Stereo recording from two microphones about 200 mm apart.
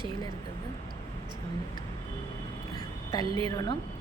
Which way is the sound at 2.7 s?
20° left (ahead or behind).